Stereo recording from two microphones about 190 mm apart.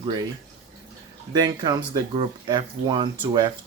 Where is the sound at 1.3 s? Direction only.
20° right (ahead or behind).